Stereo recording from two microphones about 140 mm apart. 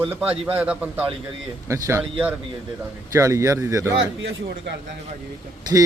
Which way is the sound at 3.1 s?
20° right (ahead or behind).